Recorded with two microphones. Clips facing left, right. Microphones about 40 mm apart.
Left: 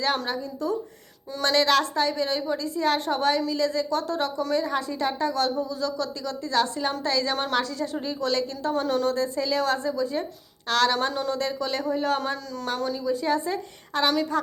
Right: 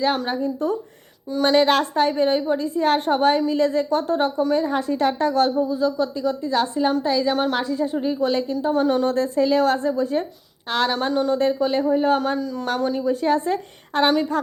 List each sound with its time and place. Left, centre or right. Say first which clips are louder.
0.3 s a woman's voice: right 5 dB; right
1.4 s speech: right 6 dB; right
1.7 s a woman's voice: right 3 dB; right
5.4 s a woman's voice: right 6 dB; right
5.7 s speech: right 7 dB; right
9.0 s a woman's voice: right 6 dB; right
10.7 s speech: even; right
10.9 s speech: right 4 dB; centre
11.3 s speech: right 7 dB; right
12.6 s a woman's voice: right 4 dB; right